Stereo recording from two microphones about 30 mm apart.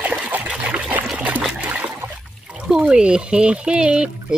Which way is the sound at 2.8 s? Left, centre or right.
Right.